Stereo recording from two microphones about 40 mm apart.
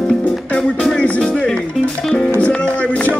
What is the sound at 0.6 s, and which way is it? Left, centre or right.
Music, left.